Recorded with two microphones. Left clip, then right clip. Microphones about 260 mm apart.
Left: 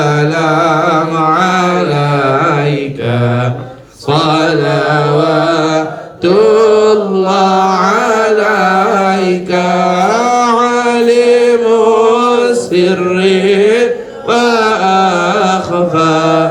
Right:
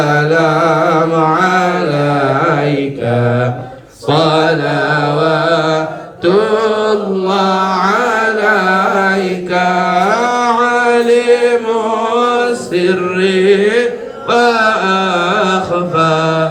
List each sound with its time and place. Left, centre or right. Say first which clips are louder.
0.1 s music: right 1 dB; left
4.1 s mantra: even; left
6.2 s mantra: left 4 dB; left
9.6 s chant: even; left
14.3 s a sound: even; left
16.0 s mantra: left 2 dB; left